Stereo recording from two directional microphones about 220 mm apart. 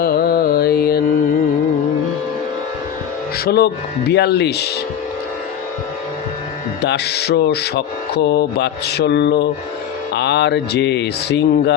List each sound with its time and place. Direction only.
0.0 s music: 45° left (ahead or behind)
3.3 s music: 45° left (ahead or behind)
6.8 s music: 50° left (ahead or behind)